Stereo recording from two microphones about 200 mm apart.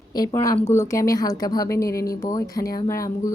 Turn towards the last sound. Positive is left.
turn(degrees=15)  # may be behind; listen again after turning